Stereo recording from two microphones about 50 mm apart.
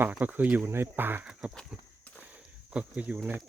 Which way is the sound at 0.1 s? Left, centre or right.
Right.